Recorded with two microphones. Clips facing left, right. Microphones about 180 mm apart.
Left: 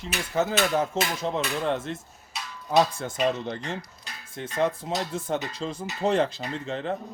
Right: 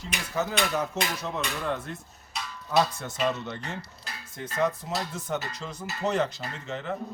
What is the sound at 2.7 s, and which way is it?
Speech, 40° left (ahead or behind).